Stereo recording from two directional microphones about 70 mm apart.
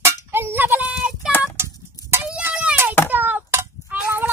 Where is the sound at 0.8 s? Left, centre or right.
Centre.